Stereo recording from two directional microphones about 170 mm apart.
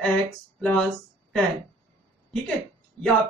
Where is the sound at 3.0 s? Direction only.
10° left (ahead or behind).